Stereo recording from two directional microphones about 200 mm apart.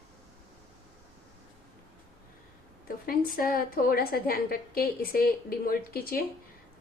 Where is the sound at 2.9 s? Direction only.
45° left (ahead or behind).